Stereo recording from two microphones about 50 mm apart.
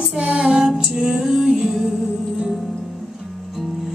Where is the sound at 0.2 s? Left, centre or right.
Centre.